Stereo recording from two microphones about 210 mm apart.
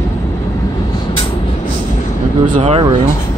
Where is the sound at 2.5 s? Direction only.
30° right (ahead or behind).